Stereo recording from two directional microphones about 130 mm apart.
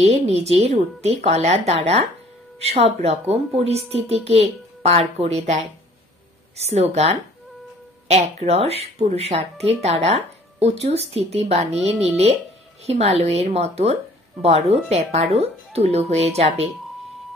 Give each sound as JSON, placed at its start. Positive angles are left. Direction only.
{"t": 0.0, "sound": "a woman's voice", "side_deg": -55}